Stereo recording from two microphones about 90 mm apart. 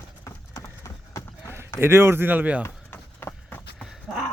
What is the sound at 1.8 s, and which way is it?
Speech, 25° right (ahead or behind).